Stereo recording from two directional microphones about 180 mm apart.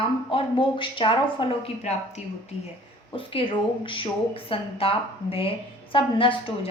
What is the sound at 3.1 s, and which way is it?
Speech, 30° left (ahead or behind).